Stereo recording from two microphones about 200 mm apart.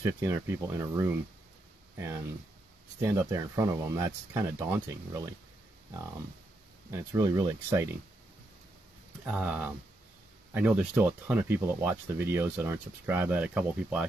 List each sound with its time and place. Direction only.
0.0 s speech: 15° right (ahead or behind)
3.0 s speech: 15° right (ahead or behind)
6.9 s speech: 15° right (ahead or behind)
9.2 s speech: 5° right (ahead or behind)